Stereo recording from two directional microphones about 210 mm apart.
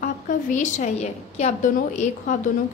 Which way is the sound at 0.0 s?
35° left (ahead or behind).